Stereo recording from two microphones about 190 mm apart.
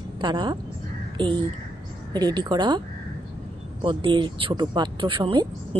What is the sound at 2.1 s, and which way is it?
Speech, 20° right (ahead or behind).